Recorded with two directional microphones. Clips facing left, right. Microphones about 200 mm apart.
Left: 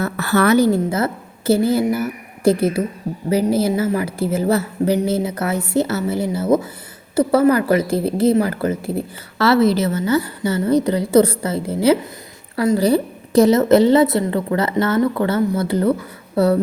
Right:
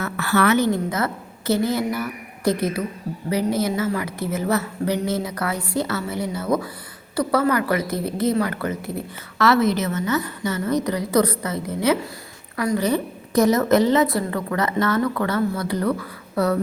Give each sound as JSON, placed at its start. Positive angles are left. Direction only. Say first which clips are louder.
{"t": 0.0, "sound": "a woman's voice", "louder": "left 3 dB", "side_deg": 40}